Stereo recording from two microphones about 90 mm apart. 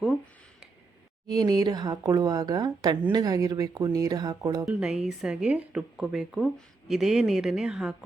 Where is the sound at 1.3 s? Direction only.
45° right (ahead or behind).